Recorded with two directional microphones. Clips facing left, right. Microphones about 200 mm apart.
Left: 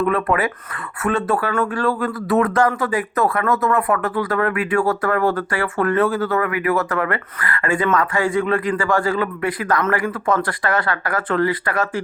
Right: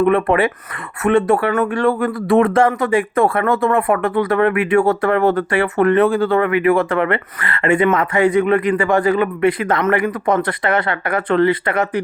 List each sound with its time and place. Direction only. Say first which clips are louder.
0.0 s speech: right 5 dB; 25° right (ahead or behind)